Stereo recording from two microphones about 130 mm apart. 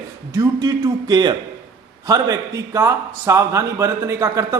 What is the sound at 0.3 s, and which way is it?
A man's voice, 30° right (ahead or behind).